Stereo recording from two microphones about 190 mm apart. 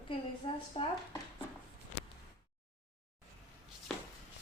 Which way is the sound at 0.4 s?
30° left (ahead or behind).